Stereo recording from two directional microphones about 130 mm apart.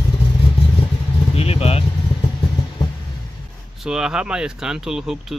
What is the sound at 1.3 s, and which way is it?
Vehicle, 50° left (ahead or behind).